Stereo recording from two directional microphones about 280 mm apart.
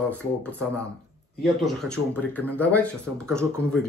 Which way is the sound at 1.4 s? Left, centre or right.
Centre.